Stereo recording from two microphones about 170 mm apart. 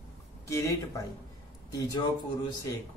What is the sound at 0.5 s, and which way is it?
Speech, 20° left (ahead or behind).